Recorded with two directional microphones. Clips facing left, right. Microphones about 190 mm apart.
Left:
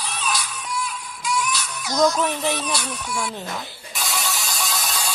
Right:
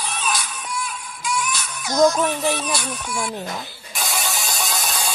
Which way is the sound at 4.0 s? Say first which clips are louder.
Right 1 dB; 50° right (ahead or behind).